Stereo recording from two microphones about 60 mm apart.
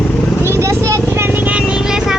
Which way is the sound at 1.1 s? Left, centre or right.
Right.